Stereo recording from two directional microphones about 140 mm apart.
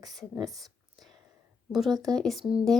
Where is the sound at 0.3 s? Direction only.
25° right (ahead or behind).